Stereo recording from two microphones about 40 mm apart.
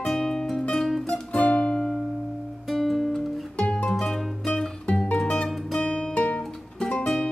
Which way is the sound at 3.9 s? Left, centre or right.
Centre.